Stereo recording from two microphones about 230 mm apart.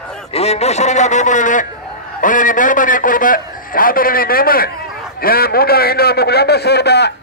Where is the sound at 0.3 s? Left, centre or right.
Left.